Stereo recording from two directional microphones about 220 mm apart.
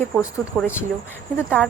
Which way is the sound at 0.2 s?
10° left (ahead or behind).